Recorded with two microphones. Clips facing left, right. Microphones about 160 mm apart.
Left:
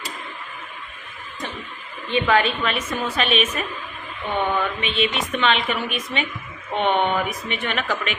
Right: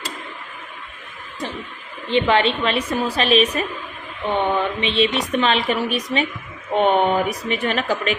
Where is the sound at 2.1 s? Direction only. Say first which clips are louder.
Right 2 dB; 30° right (ahead or behind).